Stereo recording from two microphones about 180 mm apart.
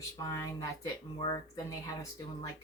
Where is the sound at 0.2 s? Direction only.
20° left (ahead or behind).